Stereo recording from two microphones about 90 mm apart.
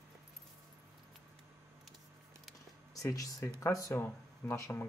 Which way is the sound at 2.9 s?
40° left (ahead or behind).